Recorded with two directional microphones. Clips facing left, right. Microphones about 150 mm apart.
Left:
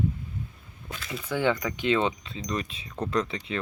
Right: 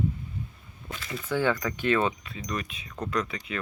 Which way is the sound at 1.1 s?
15° left (ahead or behind).